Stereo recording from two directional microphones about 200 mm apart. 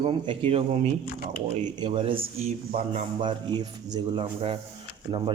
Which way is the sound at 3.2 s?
25° right (ahead or behind).